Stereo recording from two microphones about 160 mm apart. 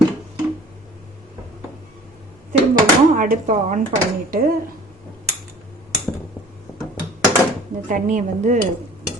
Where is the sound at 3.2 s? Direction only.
55° right (ahead or behind).